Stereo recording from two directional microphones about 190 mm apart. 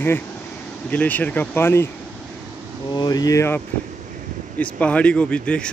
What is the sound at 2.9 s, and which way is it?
Speech, 20° left (ahead or behind).